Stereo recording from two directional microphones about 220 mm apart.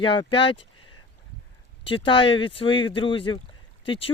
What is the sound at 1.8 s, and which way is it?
Speech, 20° left (ahead or behind).